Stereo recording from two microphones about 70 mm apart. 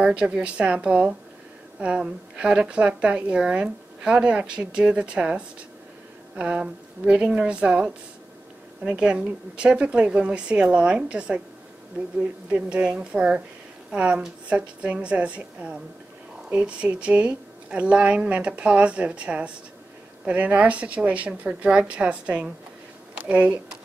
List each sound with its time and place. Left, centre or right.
0.0 s a woman's voice: centre
12.4 s a woman's voice: centre